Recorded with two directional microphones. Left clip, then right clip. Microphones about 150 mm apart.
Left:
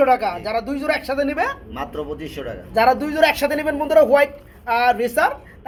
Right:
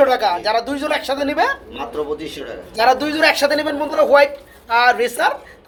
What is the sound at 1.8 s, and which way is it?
A man's voice, 10° right (ahead or behind).